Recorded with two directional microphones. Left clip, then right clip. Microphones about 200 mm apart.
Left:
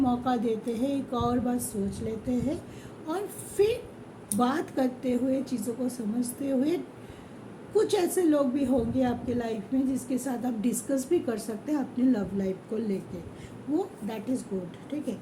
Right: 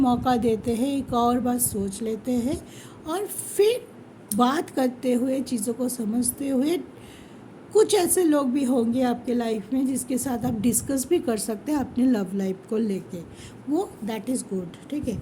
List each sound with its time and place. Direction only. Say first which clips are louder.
0.0 s a woman's voice: right 5 dB; 50° right (ahead or behind)